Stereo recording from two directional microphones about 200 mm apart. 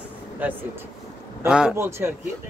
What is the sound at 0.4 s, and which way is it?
Speech, 10° right (ahead or behind).